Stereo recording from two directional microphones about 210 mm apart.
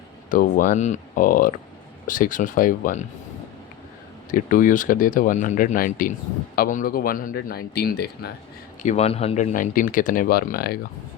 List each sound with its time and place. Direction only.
0.3 s speech: 40° left (ahead or behind)
4.3 s speech: 40° left (ahead or behind)
8.8 s speech: 30° left (ahead or behind)